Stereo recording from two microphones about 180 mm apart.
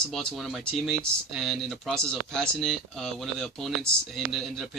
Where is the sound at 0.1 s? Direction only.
5° left (ahead or behind).